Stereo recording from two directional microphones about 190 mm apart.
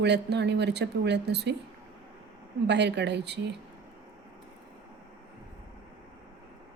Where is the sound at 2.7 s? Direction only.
65° right (ahead or behind).